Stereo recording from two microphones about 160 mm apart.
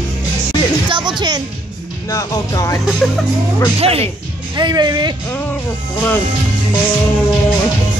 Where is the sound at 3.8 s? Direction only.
40° right (ahead or behind).